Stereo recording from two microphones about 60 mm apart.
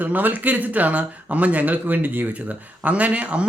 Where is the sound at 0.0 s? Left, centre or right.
Right.